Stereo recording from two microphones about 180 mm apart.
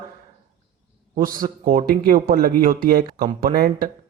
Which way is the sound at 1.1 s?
50° right (ahead or behind).